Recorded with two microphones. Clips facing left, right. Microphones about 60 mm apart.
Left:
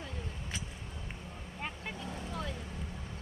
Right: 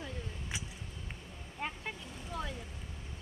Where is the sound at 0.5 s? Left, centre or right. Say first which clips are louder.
Left 1 dB; centre.